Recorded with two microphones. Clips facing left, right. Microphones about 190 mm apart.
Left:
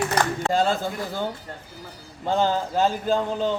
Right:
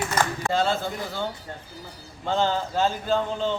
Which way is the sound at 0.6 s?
15° left (ahead or behind).